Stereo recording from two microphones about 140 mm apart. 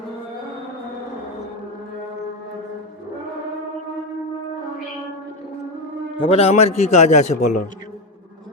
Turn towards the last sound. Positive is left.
turn(degrees=55)  # may be behind; listen again after turning